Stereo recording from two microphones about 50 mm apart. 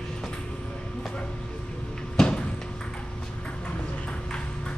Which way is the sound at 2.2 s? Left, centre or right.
Centre.